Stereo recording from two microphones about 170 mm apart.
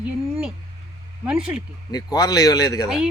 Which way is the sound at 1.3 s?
5° right (ahead or behind).